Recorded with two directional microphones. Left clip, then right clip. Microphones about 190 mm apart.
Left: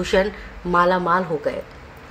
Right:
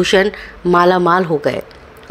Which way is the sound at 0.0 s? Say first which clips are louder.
Right 7 dB; 40° right (ahead or behind).